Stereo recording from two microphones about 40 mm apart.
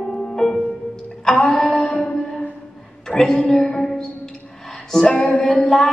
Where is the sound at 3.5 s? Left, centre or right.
Centre.